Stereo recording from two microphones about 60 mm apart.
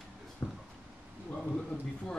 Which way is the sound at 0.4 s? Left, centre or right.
Left.